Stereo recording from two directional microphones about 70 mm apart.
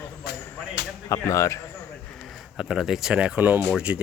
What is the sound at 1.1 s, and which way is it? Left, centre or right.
Speech, left.